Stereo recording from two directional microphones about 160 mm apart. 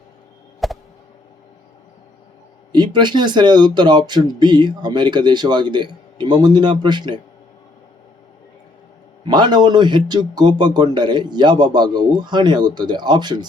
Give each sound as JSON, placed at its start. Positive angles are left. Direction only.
{"t": 0.6, "sound": "a sound", "side_deg": 0}
{"t": 2.7, "sound": "speech", "side_deg": -25}
{"t": 9.2, "sound": "speech", "side_deg": -30}